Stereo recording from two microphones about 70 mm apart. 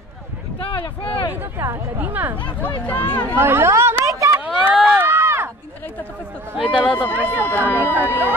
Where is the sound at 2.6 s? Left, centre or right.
Left.